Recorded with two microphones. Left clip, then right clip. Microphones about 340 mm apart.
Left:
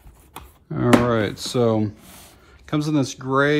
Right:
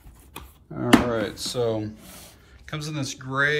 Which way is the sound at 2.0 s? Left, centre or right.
Centre.